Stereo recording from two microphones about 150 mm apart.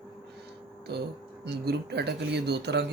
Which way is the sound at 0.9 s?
90° right.